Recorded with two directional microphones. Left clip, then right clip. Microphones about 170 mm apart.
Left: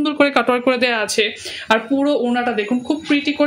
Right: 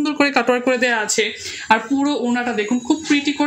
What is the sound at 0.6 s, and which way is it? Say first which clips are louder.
Speech: left 1 dB; 35° left (ahead or behind).